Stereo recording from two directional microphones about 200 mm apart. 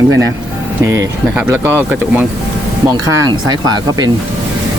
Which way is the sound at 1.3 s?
10° right (ahead or behind).